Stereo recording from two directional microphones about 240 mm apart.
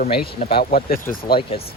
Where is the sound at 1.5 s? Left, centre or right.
Left.